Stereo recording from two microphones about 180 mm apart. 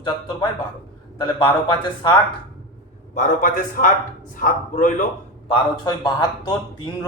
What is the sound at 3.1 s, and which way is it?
A man's voice, 50° left (ahead or behind).